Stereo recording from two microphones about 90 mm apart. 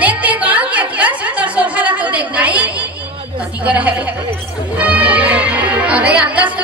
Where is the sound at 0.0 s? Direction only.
15° right (ahead or behind).